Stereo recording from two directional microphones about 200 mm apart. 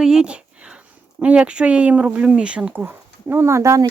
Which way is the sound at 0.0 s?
5° right (ahead or behind).